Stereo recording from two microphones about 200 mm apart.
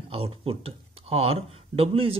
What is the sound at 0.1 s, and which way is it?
Speech, 30° right (ahead or behind).